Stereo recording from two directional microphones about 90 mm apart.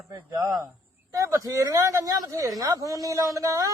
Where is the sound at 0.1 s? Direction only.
40° right (ahead or behind).